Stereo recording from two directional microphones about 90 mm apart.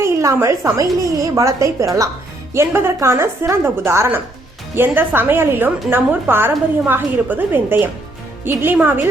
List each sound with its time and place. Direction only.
0.0 s a woman's voice: 30° right (ahead or behind)